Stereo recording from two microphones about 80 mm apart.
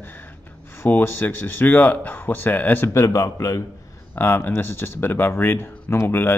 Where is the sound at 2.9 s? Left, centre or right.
Left.